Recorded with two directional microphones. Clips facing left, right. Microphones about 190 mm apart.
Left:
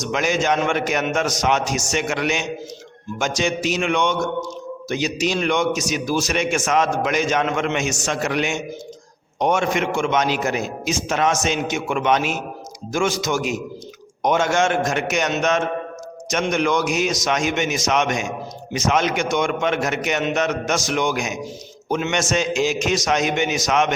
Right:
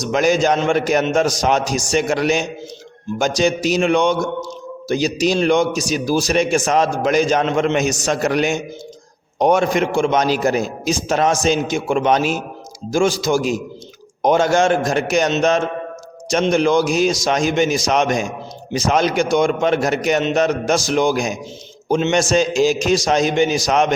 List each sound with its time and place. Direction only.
0.0 s a man's voice: 35° right (ahead or behind)